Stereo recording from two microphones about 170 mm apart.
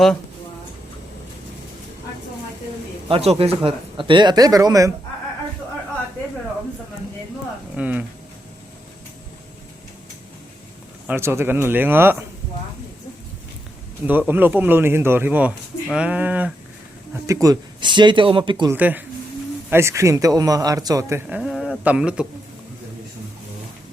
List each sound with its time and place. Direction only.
3.1 s speech: 35° right (ahead or behind)
7.8 s speech: 10° right (ahead or behind)
11.0 s speech: 10° right (ahead or behind)
14.0 s speech: 10° right (ahead or behind)
17.2 s speech: 20° right (ahead or behind)
18.7 s speech: 10° right (ahead or behind)
21.2 s speech: 5° right (ahead or behind)